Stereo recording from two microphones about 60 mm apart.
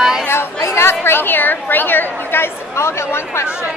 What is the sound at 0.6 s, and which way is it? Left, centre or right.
Chatter, left.